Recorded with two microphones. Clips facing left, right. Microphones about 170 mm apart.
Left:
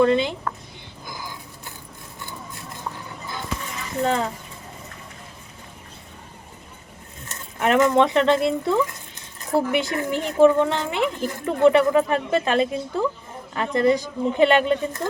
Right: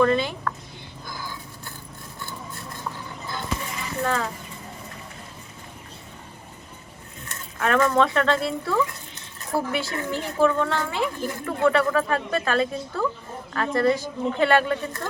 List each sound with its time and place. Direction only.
0.0 s a child's voice: 20° left (ahead or behind)
1.0 s a sound: 15° left (ahead or behind)
4.0 s a child's voice: 20° left (ahead or behind)
7.6 s a child's voice: 20° left (ahead or behind)